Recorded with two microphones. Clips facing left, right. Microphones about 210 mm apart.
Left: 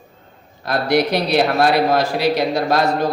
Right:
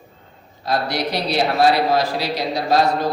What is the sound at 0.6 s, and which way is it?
A man's voice, 55° left (ahead or behind).